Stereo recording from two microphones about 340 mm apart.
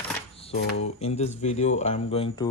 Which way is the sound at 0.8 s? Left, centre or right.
Centre.